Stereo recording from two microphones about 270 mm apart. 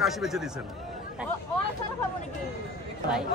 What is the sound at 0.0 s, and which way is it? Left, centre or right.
Speech, centre.